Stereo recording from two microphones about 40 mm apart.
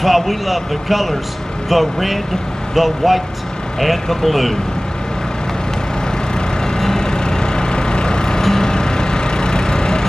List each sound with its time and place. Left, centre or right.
0.0 s speech: centre
6.8 s vehicle: centre